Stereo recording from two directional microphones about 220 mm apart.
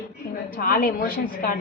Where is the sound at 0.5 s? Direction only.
45° left (ahead or behind).